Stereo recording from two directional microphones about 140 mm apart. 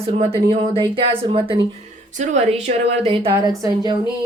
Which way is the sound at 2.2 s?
55° right (ahead or behind).